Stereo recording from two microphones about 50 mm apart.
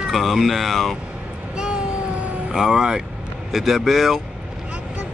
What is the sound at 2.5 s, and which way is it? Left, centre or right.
Speech, centre.